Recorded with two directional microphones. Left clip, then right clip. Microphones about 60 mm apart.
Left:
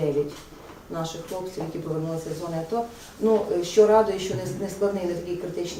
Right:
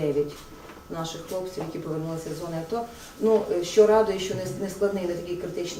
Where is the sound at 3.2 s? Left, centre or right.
Centre.